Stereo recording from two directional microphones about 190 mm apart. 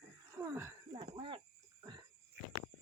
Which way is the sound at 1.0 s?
25° right (ahead or behind).